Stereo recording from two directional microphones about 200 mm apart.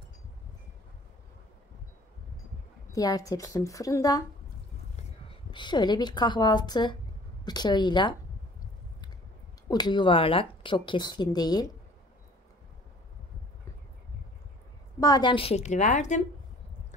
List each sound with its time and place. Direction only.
2.9 s a woman's voice: 20° left (ahead or behind)
5.5 s speech: 20° left (ahead or behind)
9.7 s speech: 20° left (ahead or behind)
15.0 s a woman's voice: 20° left (ahead or behind); by 16.2 s 35° left (ahead or behind)